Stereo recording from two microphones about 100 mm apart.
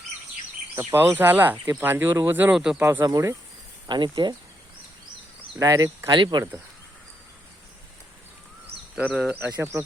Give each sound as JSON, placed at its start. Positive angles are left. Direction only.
{"t": 0.8, "sound": "speech", "side_deg": -20}
{"t": 3.1, "sound": "speech", "side_deg": -35}
{"t": 3.8, "sound": "speech", "side_deg": -50}
{"t": 5.5, "sound": "speech", "side_deg": -35}
{"t": 6.1, "sound": "speech", "side_deg": -50}
{"t": 9.0, "sound": "speech", "side_deg": -15}